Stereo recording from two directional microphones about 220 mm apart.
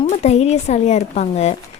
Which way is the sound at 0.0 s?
30° left (ahead or behind).